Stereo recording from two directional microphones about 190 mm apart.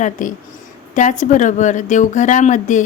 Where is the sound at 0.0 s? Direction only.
40° left (ahead or behind).